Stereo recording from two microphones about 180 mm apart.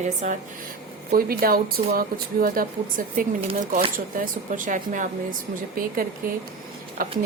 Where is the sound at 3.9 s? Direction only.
50° right (ahead or behind).